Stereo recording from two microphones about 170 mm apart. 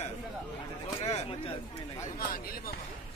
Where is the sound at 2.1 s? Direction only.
60° left (ahead or behind).